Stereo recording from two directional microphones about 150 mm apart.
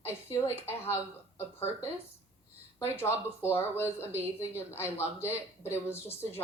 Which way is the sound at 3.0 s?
15° left (ahead or behind).